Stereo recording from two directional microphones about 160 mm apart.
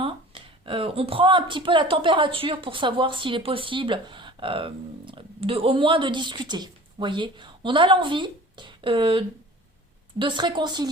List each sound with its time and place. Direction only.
0.0 s speech: 35° right (ahead or behind)